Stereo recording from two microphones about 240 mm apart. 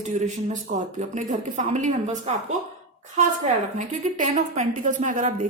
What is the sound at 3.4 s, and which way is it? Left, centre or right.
A woman's voice, right.